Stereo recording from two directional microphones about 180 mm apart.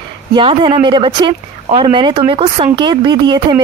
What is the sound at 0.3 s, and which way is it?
Speech, 25° right (ahead or behind).